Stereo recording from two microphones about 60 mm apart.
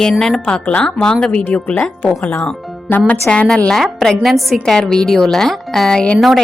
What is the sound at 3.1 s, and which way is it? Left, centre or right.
Speech, centre.